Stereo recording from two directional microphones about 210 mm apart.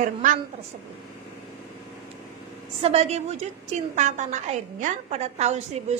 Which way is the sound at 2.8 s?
30° right (ahead or behind).